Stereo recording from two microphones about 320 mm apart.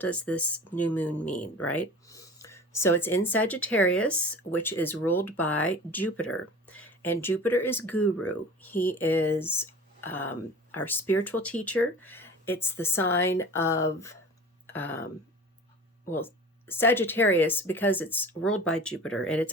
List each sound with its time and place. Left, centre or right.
0.0 s speech: centre
1.5 s speech: left
2.0 s speech: centre
6.1 s speech: left
7.0 s speech: centre
7.9 s speech: left
8.6 s speech: centre
16.0 s speech: centre